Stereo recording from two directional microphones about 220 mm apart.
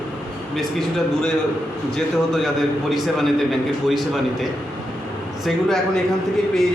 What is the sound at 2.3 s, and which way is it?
A man's voice, centre (ahead or behind).